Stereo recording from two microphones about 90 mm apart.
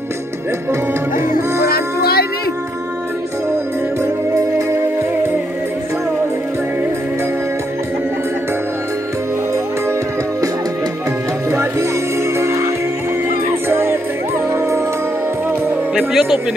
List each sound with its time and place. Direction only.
12.4 s music: 35° right (ahead or behind)
13.7 s music: 25° right (ahead or behind)
15.9 s music: 5° right (ahead or behind)